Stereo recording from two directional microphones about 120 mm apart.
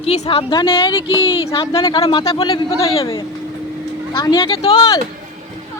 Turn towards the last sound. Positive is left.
turn(degrees=35)  # may be behind; listen again after turning